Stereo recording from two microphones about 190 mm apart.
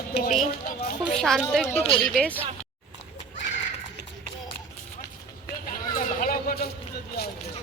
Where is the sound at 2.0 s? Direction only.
5° left (ahead or behind).